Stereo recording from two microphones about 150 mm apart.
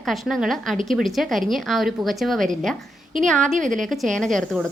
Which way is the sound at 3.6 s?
60° right (ahead or behind).